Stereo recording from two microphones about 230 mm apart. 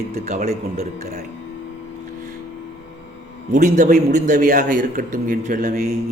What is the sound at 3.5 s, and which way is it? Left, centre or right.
A man's voice, right.